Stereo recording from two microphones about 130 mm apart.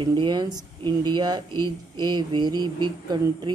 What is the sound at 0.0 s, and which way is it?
Speech, 35° right (ahead or behind).